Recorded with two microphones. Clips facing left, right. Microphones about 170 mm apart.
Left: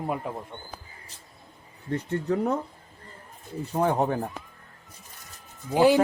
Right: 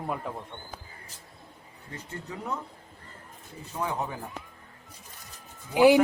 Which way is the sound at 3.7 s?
40° left (ahead or behind).